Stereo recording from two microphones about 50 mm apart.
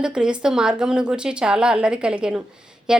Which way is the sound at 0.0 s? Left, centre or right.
Centre.